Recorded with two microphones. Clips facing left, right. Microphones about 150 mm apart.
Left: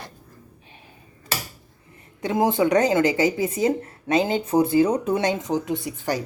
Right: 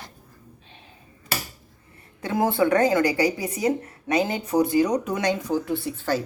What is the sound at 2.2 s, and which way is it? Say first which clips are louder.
Speech: left 1 dB; 20° left (ahead or behind).